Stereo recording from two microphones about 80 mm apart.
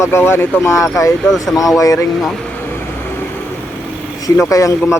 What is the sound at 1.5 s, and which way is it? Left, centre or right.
Speech, centre.